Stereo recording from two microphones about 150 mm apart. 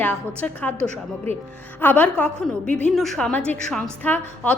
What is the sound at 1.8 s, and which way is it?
A woman's voice, 10° left (ahead or behind).